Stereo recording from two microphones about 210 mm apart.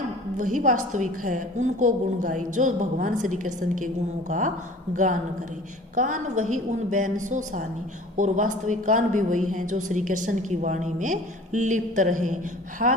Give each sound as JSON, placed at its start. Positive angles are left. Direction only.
{"t": 0.3, "sound": "a woman's voice", "side_deg": -40}
{"t": 5.9, "sound": "a woman's voice", "side_deg": -35}